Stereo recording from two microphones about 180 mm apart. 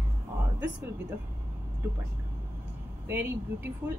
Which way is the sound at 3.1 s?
10° right (ahead or behind).